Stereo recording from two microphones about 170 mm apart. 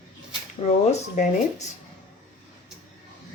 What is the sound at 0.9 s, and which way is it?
Speech, 45° left (ahead or behind).